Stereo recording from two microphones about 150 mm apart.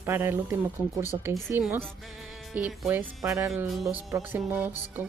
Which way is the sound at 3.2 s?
20° right (ahead or behind).